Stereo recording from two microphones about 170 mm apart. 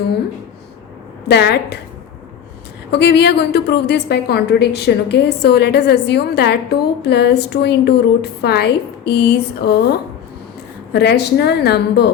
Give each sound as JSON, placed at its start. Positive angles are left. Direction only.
{"t": 1.3, "sound": "a woman's voice", "side_deg": 75}
{"t": 2.9, "sound": "a woman's voice", "side_deg": 75}
{"t": 10.9, "sound": "a woman's voice", "side_deg": 75}